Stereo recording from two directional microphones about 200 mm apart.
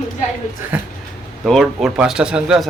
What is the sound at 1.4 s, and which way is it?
Speech, centre (ahead or behind).